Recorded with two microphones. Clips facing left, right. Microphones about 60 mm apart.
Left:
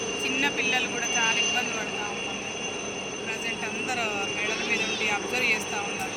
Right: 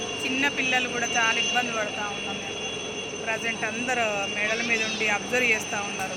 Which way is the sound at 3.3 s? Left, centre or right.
Right.